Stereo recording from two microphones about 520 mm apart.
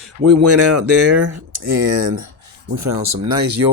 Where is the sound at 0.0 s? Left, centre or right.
Right.